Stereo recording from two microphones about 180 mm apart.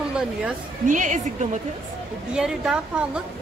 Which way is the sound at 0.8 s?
45° right (ahead or behind).